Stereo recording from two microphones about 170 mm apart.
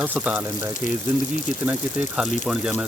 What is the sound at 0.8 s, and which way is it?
Speech, 45° left (ahead or behind).